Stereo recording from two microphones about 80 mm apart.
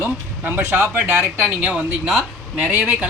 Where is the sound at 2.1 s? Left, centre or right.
Centre.